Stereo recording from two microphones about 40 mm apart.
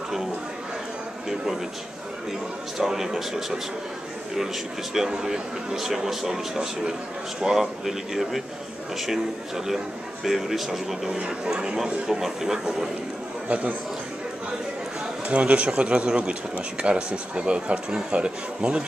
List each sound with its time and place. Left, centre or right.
2.8 s a man's voice: centre
4.9 s a man's voice: centre
10.2 s a man's voice: centre
11.1 s speech: right
11.8 s a man's voice: centre
13.5 s a man's voice: right
15.2 s speech: right